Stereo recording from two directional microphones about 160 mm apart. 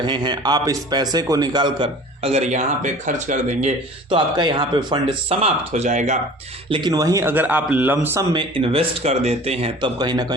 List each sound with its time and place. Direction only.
0.0 s speech: 30° right (ahead or behind); by 3.7 s 50° right (ahead or behind)
4.1 s speech: 30° right (ahead or behind); by 6.1 s 50° right (ahead or behind)
6.7 s a man's voice: 30° right (ahead or behind); by 8.2 s 10° right (ahead or behind)
8.3 s speech: 30° right (ahead or behind)